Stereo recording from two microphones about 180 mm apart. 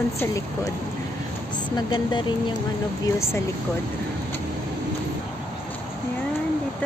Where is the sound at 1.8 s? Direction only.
25° left (ahead or behind).